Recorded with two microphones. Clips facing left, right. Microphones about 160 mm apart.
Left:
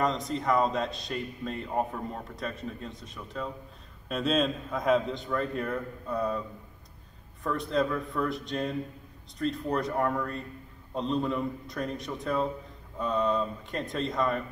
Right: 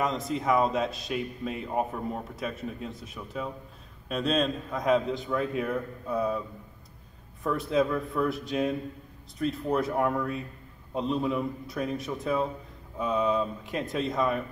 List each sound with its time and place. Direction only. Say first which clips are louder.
0.0 s a man's voice: even; 5° right (ahead or behind)
7.4 s a man's voice: right 2 dB; 5° right (ahead or behind)